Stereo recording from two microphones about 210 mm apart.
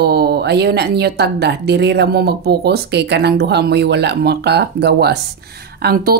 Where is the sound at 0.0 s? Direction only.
50° right (ahead or behind).